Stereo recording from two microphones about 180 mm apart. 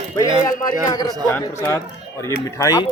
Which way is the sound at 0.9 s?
20° left (ahead or behind).